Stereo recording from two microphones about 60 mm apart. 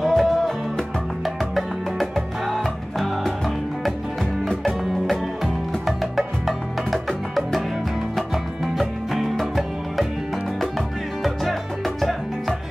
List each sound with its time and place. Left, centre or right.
0.0 s music: centre
8.7 s music: centre
11.2 s music: centre